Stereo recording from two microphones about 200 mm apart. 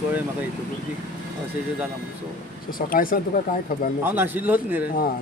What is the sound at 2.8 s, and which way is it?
Speech, 45° left (ahead or behind).